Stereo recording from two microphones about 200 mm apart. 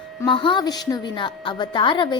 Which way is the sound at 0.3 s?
25° left (ahead or behind).